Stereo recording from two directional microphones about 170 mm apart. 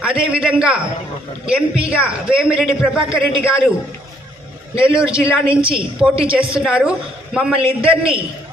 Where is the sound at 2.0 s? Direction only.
5° right (ahead or behind).